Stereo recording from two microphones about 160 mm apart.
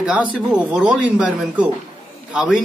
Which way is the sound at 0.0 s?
5° right (ahead or behind).